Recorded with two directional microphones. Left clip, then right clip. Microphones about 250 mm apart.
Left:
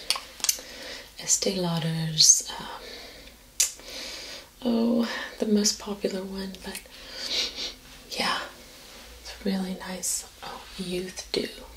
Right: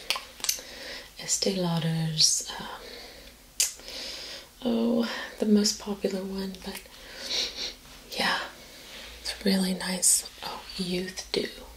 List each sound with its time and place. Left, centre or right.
0.1 s a sound: centre
7.2 s wheeze: centre
9.4 s speech: centre
10.9 s speech: centre